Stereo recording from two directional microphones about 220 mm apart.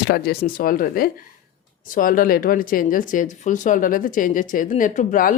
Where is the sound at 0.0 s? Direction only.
45° left (ahead or behind).